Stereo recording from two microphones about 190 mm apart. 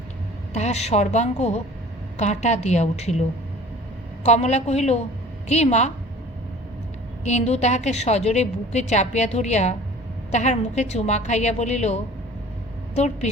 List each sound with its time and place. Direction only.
0.5 s a woman's voice: 35° left (ahead or behind)
4.3 s a woman's voice: 35° left (ahead or behind)
7.3 s a woman's voice: 35° left (ahead or behind)